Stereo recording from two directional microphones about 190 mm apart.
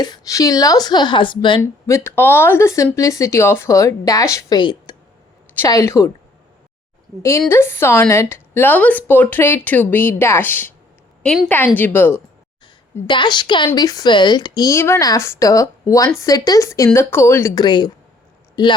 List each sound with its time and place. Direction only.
0.0 s speech: 20° left (ahead or behind)
1.9 s speech: 10° left (ahead or behind)
7.2 s speech: 15° left (ahead or behind)
13.1 s speech: 25° left (ahead or behind)